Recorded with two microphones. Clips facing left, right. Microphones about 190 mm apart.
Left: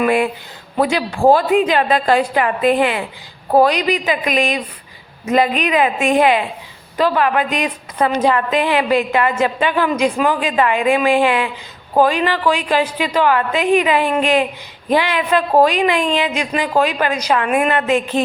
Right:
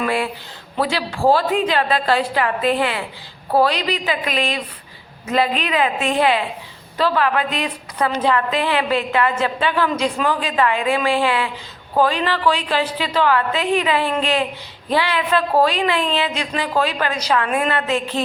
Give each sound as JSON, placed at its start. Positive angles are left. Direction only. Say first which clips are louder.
{"t": 0.0, "sound": "a woman's voice", "louder": "left 6 dB", "side_deg": 15}